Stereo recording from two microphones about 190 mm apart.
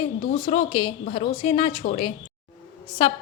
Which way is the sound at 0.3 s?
30° left (ahead or behind).